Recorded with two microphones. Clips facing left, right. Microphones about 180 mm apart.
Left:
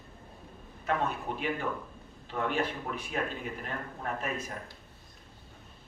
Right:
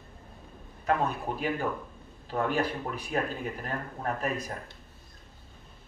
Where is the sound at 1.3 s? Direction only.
40° right (ahead or behind).